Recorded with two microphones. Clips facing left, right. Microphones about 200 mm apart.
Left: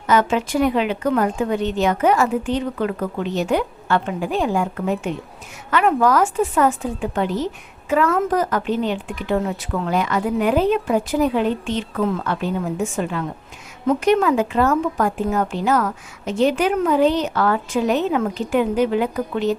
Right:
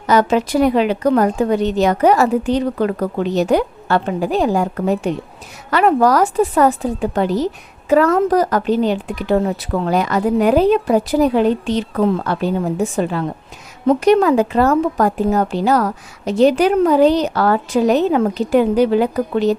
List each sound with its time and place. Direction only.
0.1 s a woman's voice: 35° right (ahead or behind)